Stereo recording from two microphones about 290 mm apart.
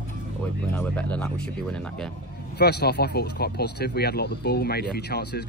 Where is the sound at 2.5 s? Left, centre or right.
Left.